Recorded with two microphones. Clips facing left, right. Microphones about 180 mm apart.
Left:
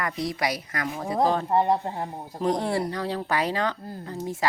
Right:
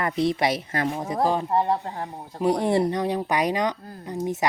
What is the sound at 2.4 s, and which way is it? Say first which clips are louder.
Speech: right 4 dB; 10° right (ahead or behind).